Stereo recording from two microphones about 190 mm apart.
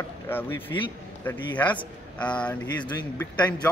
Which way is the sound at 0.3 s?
10° left (ahead or behind).